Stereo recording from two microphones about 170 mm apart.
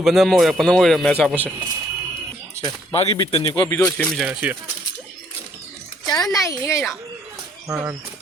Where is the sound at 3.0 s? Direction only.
30° left (ahead or behind).